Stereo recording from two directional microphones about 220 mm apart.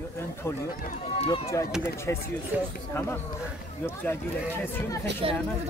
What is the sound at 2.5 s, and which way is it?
Speech, 5° right (ahead or behind).